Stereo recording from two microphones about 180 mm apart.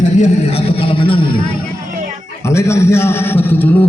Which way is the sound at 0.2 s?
30° left (ahead or behind).